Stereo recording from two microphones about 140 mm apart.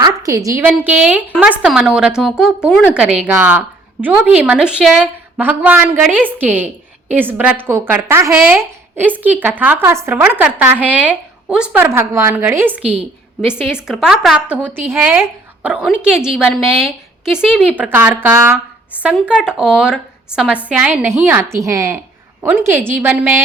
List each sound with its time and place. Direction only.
0.0 s a sound: 25° right (ahead or behind)
0.6 s a woman's voice: 10° right (ahead or behind)
12.8 s a woman's voice: 45° right (ahead or behind)
13.4 s a woman's voice: 5° right (ahead or behind)